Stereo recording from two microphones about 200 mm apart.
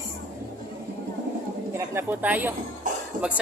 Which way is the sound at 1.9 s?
10° right (ahead or behind).